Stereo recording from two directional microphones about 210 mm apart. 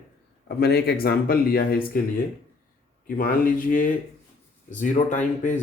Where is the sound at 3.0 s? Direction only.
45° left (ahead or behind).